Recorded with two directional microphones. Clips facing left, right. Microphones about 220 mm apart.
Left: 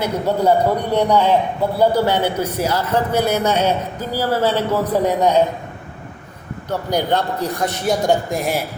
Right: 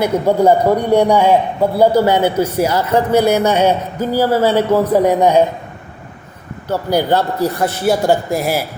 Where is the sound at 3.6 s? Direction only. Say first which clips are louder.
Right 5 dB; 50° right (ahead or behind).